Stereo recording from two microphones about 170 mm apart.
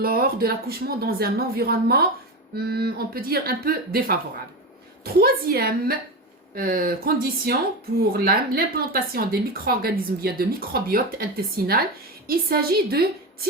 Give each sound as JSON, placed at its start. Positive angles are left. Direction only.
{"t": 0.0, "sound": "speech", "side_deg": -60}